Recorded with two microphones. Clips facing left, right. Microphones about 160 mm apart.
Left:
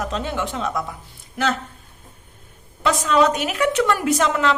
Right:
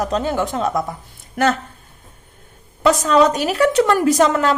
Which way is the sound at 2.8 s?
40° right (ahead or behind).